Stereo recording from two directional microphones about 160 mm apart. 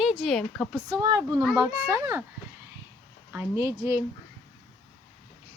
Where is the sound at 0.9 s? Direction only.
25° right (ahead or behind).